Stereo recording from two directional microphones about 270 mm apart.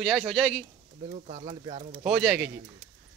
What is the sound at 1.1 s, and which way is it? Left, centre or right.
Speech, right.